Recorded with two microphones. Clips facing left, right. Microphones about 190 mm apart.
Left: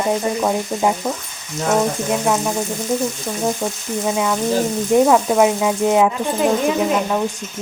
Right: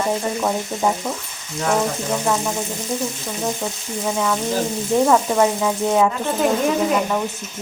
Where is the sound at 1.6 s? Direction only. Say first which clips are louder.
Left 3 dB; 15° left (ahead or behind).